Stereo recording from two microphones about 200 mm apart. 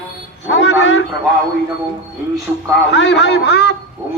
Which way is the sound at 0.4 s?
60° left (ahead or behind).